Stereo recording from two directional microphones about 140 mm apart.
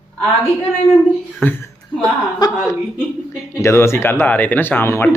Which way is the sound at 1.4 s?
15° left (ahead or behind).